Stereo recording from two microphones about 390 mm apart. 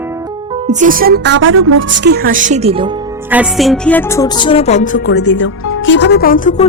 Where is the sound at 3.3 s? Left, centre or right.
Centre.